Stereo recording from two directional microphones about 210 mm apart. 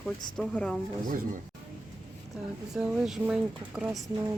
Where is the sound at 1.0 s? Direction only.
40° right (ahead or behind).